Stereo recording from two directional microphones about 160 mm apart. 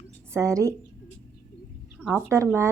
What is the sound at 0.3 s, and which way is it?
Speech, 20° right (ahead or behind).